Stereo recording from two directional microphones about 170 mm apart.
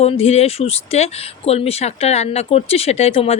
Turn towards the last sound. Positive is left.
turn(degrees=35)  # may be behind; listen again after turning